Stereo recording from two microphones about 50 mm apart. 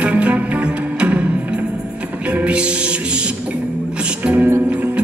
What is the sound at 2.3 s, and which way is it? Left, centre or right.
Music, right.